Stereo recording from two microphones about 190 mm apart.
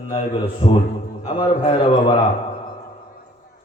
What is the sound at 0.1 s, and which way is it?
A man's voice, 35° left (ahead or behind).